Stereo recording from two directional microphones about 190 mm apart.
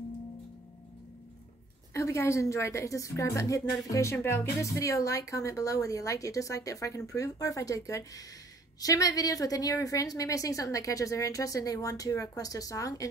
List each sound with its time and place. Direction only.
2.0 s speech: 15° left (ahead or behind)